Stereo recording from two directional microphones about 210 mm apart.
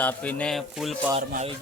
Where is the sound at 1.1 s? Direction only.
30° right (ahead or behind).